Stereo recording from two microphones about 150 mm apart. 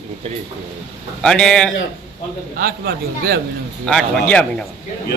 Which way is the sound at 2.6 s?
75° right (ahead or behind).